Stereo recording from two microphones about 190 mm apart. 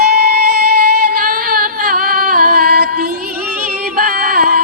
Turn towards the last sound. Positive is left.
turn(degrees=-50)  # may be behind; listen again after turning